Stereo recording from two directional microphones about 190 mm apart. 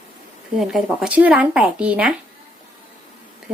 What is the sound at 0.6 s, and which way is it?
Speech, 5° right (ahead or behind).